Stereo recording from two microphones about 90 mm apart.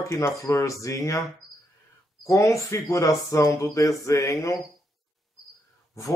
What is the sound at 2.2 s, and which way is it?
Speech, 35° left (ahead or behind).